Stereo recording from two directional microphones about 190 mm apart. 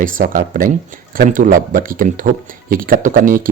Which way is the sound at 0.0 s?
45° right (ahead or behind).